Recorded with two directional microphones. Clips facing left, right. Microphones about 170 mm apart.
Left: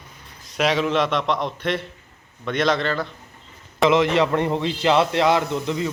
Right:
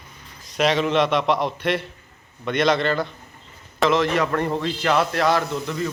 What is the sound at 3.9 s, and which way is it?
A man's voice, 20° left (ahead or behind).